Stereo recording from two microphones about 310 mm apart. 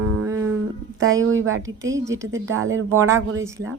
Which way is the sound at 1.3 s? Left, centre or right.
Right.